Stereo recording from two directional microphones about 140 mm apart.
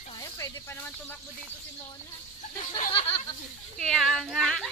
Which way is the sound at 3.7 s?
5° left (ahead or behind).